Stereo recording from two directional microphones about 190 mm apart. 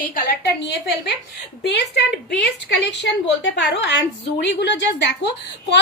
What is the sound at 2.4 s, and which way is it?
A woman's voice, 65° left (ahead or behind).